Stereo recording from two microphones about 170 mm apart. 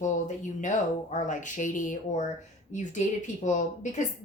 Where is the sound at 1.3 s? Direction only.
50° left (ahead or behind).